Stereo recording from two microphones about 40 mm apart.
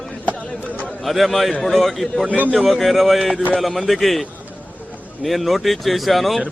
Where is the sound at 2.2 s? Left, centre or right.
Right.